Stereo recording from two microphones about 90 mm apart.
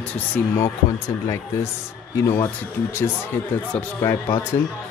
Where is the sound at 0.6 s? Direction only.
35° left (ahead or behind).